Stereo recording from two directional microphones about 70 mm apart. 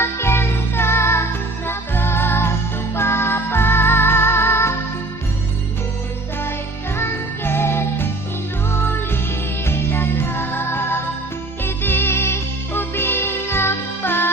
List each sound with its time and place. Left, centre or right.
0.0 s music: left
6.9 s music: left